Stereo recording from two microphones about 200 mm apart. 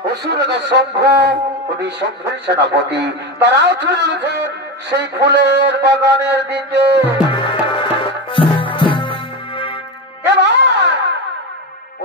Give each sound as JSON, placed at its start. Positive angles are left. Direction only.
{"t": 0.0, "sound": "a man's voice", "side_deg": -55}
{"t": 7.2, "sound": "music", "side_deg": 25}
{"t": 10.2, "sound": "music", "side_deg": -60}